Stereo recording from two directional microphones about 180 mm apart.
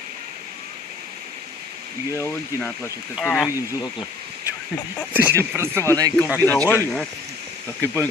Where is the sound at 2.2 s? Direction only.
10° left (ahead or behind).